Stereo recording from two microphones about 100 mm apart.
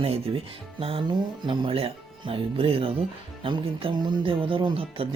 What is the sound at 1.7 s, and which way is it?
Speech, 70° right (ahead or behind).